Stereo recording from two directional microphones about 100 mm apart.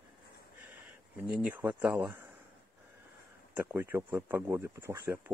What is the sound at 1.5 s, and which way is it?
Speech, 20° right (ahead or behind).